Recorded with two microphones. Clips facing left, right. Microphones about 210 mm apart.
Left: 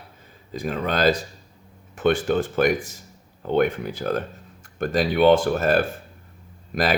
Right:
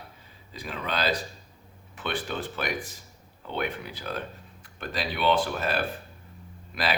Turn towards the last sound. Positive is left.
turn(degrees=45)  # may be behind; listen again after turning